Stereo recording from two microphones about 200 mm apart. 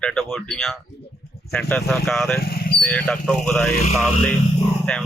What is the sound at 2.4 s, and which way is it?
Speech, 50° left (ahead or behind).